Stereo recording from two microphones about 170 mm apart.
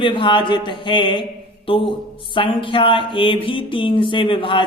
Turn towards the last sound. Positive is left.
turn(degrees=30)  # may be behind; listen again after turning